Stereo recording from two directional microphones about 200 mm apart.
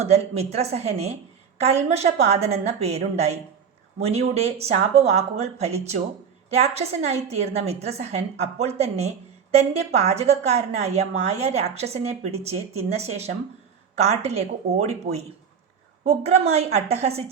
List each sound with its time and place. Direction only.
0.0 s a woman's voice: 30° right (ahead or behind)